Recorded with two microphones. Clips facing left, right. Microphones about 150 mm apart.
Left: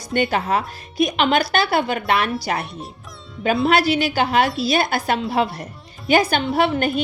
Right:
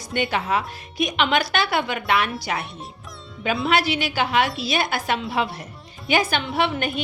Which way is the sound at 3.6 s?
35° left (ahead or behind).